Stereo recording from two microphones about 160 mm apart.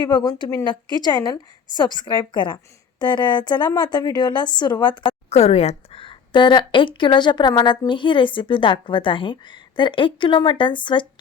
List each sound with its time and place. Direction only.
0.0 s a woman's voice: 30° left (ahead or behind)
5.3 s a woman's voice: 45° left (ahead or behind)